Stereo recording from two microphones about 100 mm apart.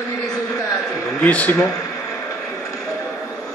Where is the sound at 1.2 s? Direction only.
15° left (ahead or behind).